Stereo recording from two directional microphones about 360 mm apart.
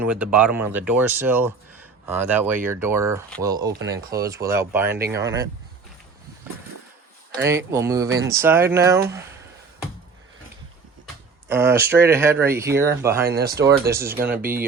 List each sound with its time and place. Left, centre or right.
0.0 s speech: centre
7.4 s speech: centre
11.4 s speech: centre
13.2 s speech: right
13.9 s speech: centre
14.4 s speech: right